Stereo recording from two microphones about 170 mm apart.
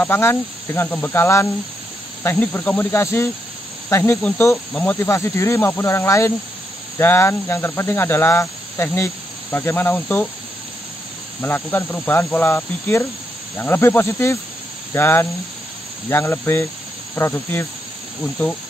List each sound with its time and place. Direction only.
0.0 s speech: 10° left (ahead or behind)
11.4 s speech: 10° left (ahead or behind)